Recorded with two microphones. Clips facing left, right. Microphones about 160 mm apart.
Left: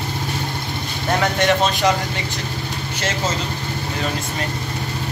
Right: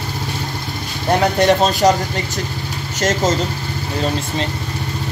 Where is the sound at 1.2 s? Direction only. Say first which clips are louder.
Right 4 dB; 35° right (ahead or behind).